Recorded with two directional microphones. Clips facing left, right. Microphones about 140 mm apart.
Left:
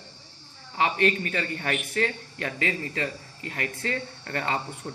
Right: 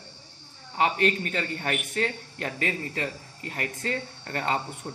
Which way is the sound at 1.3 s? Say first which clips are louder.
Even; 25° right (ahead or behind).